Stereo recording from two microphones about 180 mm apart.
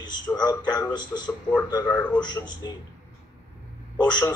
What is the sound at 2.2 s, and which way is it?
Speech, 25° left (ahead or behind).